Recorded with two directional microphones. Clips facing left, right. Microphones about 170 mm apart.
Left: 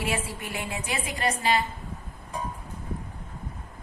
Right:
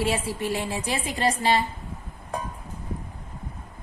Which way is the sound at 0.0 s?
30° right (ahead or behind).